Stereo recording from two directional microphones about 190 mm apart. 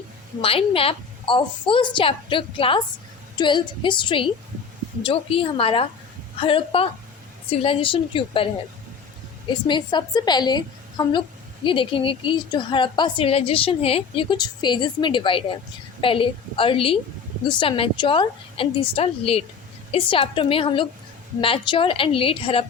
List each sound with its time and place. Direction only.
0.4 s a woman's voice: 30° left (ahead or behind)
9.5 s a woman's voice: 25° left (ahead or behind)